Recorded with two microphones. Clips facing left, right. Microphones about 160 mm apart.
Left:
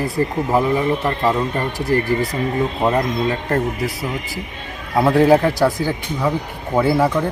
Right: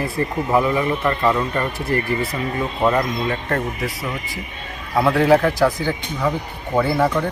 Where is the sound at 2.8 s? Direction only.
30° left (ahead or behind).